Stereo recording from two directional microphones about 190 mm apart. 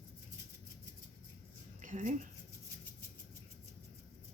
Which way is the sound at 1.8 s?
40° right (ahead or behind).